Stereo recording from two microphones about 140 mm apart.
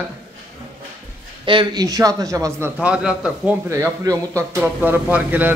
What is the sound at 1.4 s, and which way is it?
A man's voice, 35° right (ahead or behind).